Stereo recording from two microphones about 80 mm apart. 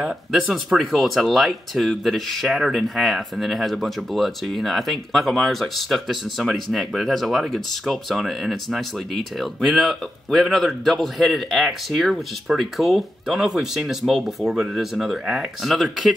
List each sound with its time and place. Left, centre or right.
0.0 s speech: centre